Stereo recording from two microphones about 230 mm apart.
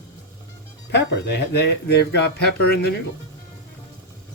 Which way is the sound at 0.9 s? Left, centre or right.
Left.